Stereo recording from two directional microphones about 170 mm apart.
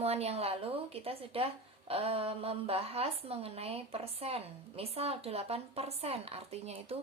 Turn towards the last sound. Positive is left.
turn(degrees=-35)  # may be behind; listen again after turning